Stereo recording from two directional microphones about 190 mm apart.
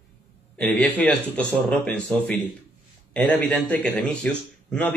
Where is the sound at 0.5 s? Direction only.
5° left (ahead or behind).